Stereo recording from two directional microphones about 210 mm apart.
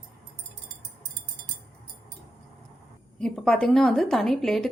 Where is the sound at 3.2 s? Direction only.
Centre (ahead or behind).